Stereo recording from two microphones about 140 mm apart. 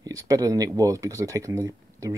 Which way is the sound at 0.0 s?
25° right (ahead or behind).